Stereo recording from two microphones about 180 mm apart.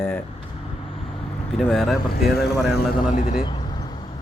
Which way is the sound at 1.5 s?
Centre (ahead or behind).